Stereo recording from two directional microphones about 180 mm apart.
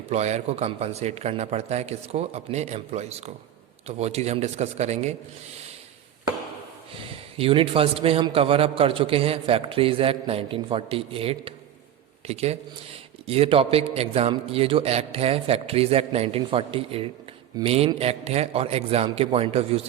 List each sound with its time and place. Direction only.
0.1 s a man's voice: 35° right (ahead or behind)
7.3 s a man's voice: 30° right (ahead or behind)